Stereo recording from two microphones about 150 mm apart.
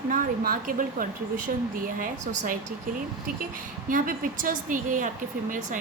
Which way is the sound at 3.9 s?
65° right (ahead or behind).